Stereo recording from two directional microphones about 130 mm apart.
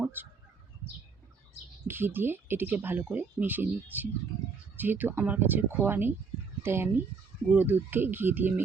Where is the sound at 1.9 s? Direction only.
15° right (ahead or behind).